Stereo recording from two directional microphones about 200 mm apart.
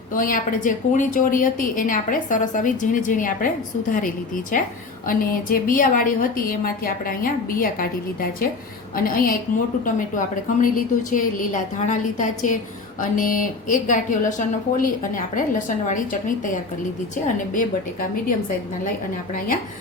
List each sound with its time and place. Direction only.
0.1 s a woman's voice: 45° left (ahead or behind)